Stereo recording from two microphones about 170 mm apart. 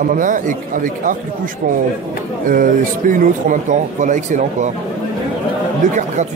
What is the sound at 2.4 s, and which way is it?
Speech, 50° right (ahead or behind).